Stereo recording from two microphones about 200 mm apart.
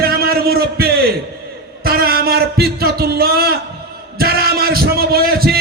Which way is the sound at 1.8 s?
50° right (ahead or behind).